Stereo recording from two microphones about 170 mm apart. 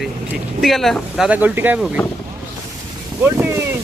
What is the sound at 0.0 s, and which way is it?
Speech, centre (ahead or behind).